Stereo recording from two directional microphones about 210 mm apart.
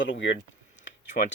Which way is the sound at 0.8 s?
55° left (ahead or behind).